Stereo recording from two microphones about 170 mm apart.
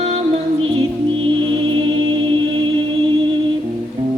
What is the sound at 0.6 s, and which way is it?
Music, 30° right (ahead or behind).